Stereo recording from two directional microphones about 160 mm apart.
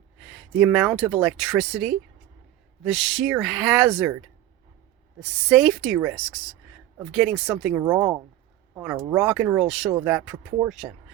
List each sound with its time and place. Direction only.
0.6 s speech: 5° right (ahead or behind)
5.2 s speech: centre (ahead or behind)
7.1 s speech: centre (ahead or behind)
7.6 s speech: 10° right (ahead or behind)
9.6 s speech: centre (ahead or behind)
9.9 s speech: 15° right (ahead or behind)